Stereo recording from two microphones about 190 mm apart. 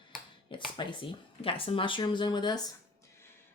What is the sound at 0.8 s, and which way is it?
Speech, 25° left (ahead or behind).